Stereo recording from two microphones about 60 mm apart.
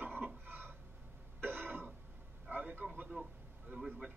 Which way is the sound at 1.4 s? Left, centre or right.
Right.